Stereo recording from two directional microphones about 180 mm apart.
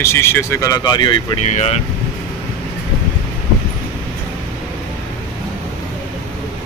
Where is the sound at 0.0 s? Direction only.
15° left (ahead or behind).